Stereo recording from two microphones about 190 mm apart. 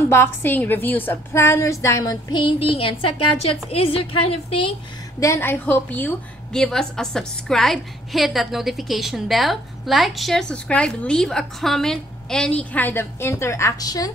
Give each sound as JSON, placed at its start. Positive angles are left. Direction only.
{"t": 0.1, "sound": "a woman's voice", "side_deg": 10}
{"t": 5.2, "sound": "a woman's voice", "side_deg": 10}